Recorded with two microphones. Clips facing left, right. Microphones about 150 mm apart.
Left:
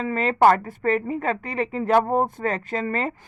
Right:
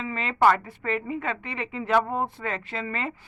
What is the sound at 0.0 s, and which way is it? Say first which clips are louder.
Speech: left 4 dB; 45° left (ahead or behind).